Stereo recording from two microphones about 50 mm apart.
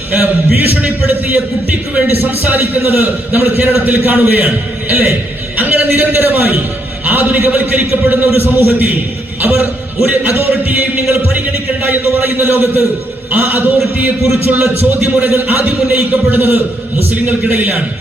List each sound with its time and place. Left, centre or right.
0.1 s a man's voice: right
2.0 s a man's voice: right